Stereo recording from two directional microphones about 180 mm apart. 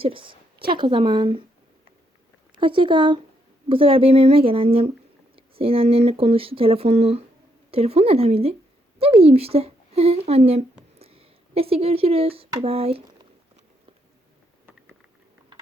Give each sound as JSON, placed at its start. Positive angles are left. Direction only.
{"t": 0.0, "sound": "a sound", "side_deg": -30}
{"t": 0.8, "sound": "speech", "side_deg": -25}
{"t": 2.6, "sound": "speech", "side_deg": -30}